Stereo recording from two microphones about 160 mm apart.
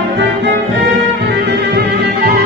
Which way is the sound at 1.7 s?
90° right.